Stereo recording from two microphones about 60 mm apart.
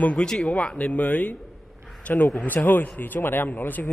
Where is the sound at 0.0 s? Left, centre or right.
Centre.